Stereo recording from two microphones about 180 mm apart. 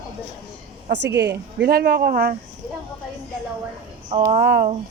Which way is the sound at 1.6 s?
60° right (ahead or behind).